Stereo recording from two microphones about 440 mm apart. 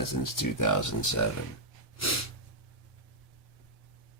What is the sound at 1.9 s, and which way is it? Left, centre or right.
Sneeze, left.